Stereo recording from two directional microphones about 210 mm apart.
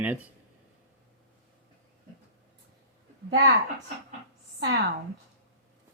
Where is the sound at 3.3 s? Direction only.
55° right (ahead or behind).